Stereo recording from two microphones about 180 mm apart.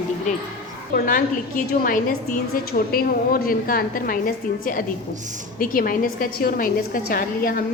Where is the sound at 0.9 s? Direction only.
50° left (ahead or behind).